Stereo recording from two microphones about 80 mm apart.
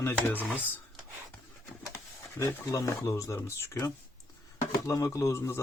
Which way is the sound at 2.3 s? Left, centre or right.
Left.